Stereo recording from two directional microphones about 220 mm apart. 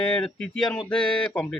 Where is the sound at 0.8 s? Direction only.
20° left (ahead or behind).